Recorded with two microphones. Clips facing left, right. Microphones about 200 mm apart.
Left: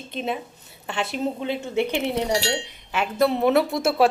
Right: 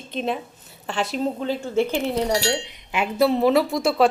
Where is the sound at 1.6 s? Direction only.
15° left (ahead or behind).